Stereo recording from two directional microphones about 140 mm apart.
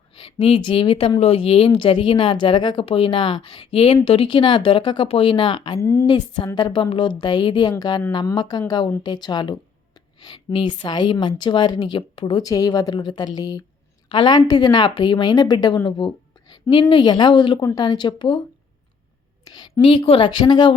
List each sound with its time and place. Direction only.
0.2 s speech: 40° left (ahead or behind)
5.8 s speech: 20° left (ahead or behind)
6.1 s speech: 30° left (ahead or behind)
12.4 s speech: 25° left (ahead or behind)
19.5 s speech: 30° left (ahead or behind)